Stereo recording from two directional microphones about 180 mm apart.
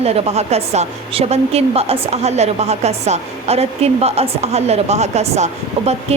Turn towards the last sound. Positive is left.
turn(degrees=-35)  # may be behind; listen again after turning